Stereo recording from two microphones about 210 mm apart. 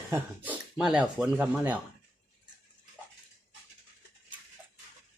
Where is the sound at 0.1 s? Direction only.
5° right (ahead or behind).